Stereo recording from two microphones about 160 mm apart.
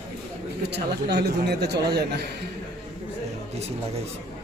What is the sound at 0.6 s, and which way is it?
Speech, 90° right.